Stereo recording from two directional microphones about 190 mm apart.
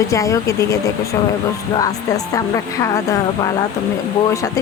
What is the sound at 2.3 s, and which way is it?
Speech, 15° left (ahead or behind).